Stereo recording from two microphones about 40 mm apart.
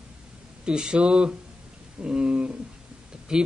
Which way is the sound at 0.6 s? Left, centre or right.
Right.